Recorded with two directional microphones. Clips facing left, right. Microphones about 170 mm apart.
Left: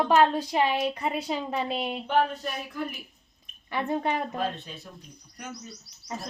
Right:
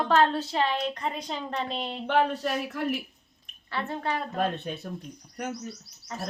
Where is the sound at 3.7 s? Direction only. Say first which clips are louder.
Left 3 dB; 15° left (ahead or behind).